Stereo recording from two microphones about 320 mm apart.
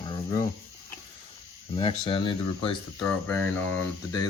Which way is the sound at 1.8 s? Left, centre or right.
Centre.